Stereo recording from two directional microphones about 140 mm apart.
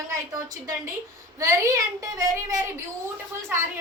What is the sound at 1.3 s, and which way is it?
A woman's voice, 25° right (ahead or behind).